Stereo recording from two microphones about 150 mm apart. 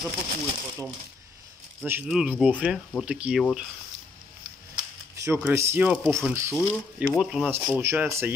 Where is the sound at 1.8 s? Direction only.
15° right (ahead or behind).